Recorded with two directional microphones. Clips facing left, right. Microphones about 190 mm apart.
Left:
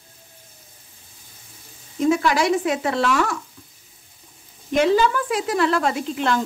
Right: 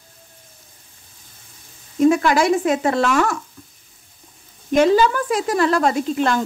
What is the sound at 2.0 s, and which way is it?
Speech, 50° right (ahead or behind).